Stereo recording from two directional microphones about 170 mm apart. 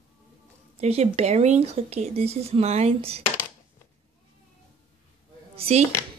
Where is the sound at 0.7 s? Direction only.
40° right (ahead or behind).